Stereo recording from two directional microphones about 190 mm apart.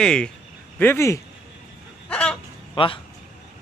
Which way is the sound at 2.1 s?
5° left (ahead or behind).